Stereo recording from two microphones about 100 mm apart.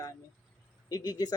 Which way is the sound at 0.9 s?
40° left (ahead or behind).